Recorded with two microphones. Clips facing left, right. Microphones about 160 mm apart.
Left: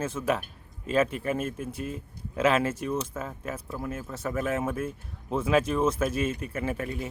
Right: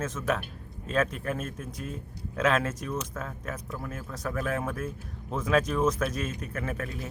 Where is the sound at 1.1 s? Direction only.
5° left (ahead or behind).